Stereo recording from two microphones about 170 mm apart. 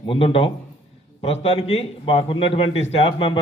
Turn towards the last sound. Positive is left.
turn(degrees=30)  # may be behind; listen again after turning